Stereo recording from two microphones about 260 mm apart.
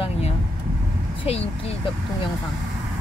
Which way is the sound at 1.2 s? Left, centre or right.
Left.